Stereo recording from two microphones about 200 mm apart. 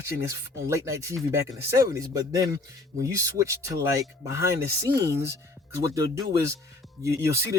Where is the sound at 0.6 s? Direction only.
15° right (ahead or behind).